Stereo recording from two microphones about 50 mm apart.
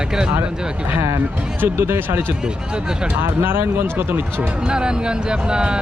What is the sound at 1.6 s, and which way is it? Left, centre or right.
Speech, right.